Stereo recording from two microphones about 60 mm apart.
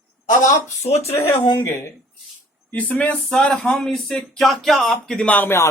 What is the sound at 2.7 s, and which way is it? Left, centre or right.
Speech, left.